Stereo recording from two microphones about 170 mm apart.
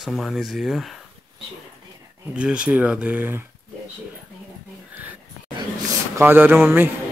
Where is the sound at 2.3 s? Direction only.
5° right (ahead or behind).